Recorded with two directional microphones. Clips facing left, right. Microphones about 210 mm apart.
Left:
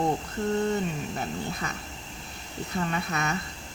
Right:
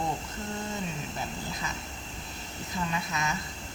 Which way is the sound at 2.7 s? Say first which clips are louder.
Left 3 dB; 60° left (ahead or behind).